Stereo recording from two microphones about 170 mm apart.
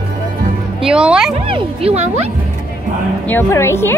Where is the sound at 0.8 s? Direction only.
5° right (ahead or behind).